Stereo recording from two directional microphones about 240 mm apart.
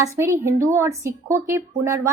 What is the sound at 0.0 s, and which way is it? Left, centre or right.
Speech, centre.